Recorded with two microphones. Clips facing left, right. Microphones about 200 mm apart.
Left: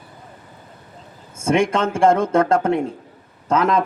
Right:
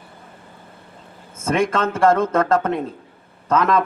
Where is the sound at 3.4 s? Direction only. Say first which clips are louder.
Even; 30° left (ahead or behind).